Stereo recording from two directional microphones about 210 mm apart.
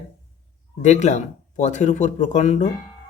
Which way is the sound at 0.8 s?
35° left (ahead or behind).